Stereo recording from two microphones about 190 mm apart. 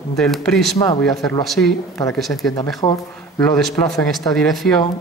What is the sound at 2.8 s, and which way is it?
Speech, 30° left (ahead or behind).